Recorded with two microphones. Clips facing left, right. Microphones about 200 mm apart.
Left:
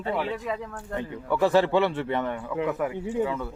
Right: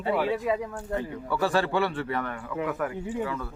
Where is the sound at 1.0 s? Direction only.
20° left (ahead or behind).